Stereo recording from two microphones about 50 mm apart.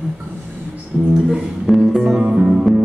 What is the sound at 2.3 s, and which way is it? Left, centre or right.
Music, centre.